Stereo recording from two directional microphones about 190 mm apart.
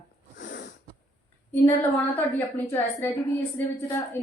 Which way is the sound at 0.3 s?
65° left (ahead or behind).